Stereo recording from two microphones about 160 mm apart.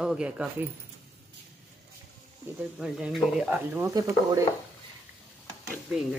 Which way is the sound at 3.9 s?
20° right (ahead or behind).